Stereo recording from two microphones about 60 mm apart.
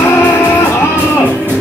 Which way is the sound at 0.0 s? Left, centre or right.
Left.